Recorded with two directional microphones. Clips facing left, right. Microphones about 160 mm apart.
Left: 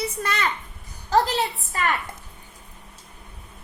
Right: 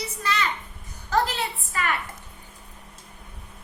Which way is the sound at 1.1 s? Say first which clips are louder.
Left 4 dB; 35° left (ahead or behind).